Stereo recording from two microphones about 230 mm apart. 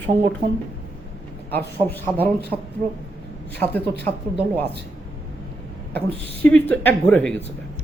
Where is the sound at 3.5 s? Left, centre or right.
Centre.